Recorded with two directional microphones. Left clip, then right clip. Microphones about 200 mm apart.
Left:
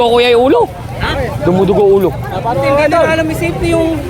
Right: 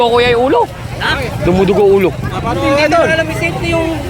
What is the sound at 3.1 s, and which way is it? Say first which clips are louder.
Speech: even; 55° left (ahead or behind).